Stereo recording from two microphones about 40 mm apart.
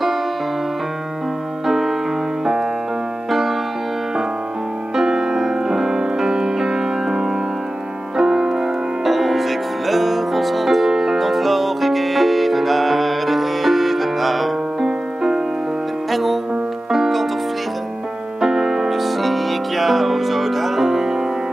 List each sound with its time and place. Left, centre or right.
1.7 s music: centre
3.3 s music: centre
4.9 s music: centre
9.0 s music: centre
14.8 s music: centre
16.1 s music: centre
18.4 s music: centre